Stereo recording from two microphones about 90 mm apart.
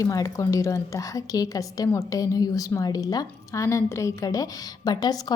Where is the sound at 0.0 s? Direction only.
40° left (ahead or behind).